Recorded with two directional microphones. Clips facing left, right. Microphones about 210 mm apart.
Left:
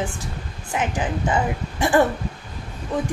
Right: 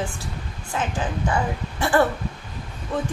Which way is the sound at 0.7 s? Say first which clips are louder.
Left 2 dB; 15° left (ahead or behind).